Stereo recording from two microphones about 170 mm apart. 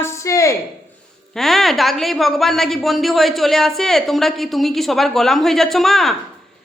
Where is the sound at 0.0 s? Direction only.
15° left (ahead or behind).